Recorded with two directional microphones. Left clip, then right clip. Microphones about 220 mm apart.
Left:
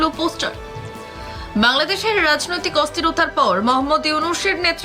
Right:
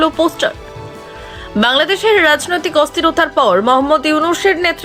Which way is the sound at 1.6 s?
20° right (ahead or behind).